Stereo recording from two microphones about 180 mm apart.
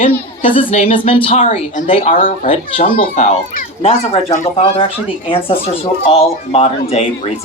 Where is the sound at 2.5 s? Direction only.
30° left (ahead or behind).